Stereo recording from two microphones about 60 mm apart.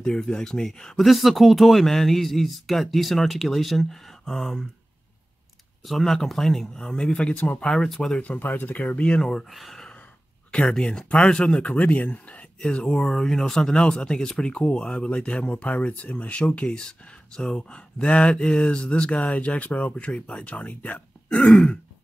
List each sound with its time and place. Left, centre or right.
0.0 s speech: centre
5.9 s speech: centre; by 7.6 s left
7.6 s speech: centre
8.2 s speech: left; by 9.8 s centre
10.5 s speech: centre
21.4 s speech: centre